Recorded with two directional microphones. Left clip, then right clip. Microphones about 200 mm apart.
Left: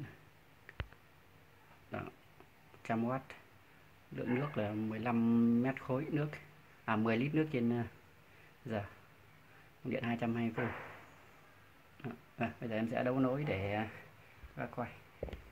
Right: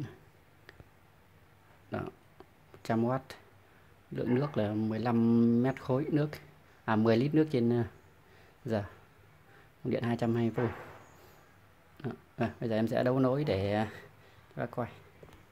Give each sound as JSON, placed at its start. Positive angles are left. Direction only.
{"t": 1.9, "sound": "a sound", "side_deg": -25}
{"t": 2.8, "sound": "speech", "side_deg": -25}
{"t": 9.8, "sound": "speech", "side_deg": -25}
{"t": 12.0, "sound": "speech", "side_deg": -25}